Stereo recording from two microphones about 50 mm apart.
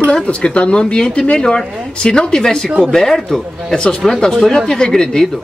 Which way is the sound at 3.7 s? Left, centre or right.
Centre.